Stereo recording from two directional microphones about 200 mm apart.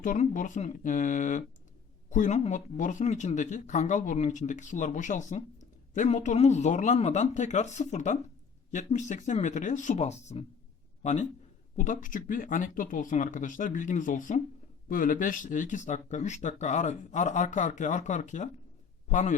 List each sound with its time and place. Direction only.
0.0 s a man's voice: 40° left (ahead or behind)